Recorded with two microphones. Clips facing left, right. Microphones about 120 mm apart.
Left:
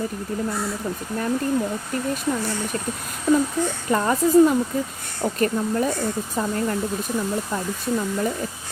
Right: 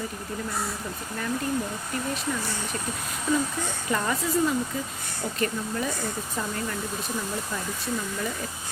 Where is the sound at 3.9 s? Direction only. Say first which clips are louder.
Left 8 dB; 40° left (ahead or behind).